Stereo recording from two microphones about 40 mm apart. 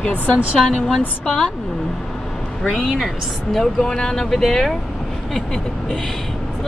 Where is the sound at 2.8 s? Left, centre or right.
Centre.